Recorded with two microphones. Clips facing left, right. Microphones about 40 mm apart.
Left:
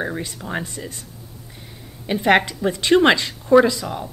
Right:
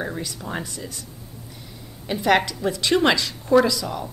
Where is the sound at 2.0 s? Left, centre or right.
Left.